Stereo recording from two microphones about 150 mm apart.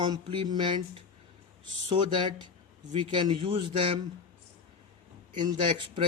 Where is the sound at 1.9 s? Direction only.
30° right (ahead or behind).